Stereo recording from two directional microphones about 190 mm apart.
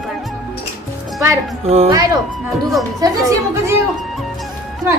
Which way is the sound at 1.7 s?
30° right (ahead or behind).